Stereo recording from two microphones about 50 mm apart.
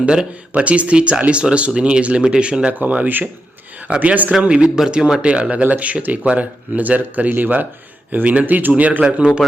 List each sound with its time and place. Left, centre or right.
0.0 s speech: right